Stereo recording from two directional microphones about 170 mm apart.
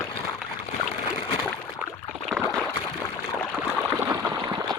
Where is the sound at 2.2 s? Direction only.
5° left (ahead or behind).